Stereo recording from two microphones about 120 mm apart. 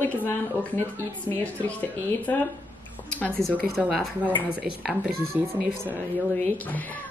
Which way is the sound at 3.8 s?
5° right (ahead or behind).